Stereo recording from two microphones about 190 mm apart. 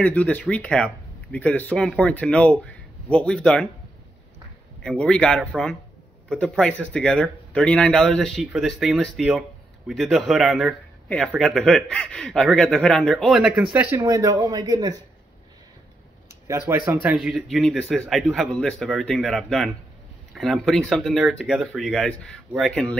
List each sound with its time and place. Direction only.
0.0 s speech: 10° left (ahead or behind)
4.8 s a man's voice: 5° left (ahead or behind); by 15.0 s 20° right (ahead or behind)
16.4 s a man's voice: 15° right (ahead or behind); by 22.9 s 5° left (ahead or behind)